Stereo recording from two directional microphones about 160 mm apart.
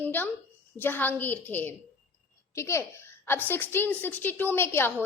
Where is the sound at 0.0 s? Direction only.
10° left (ahead or behind).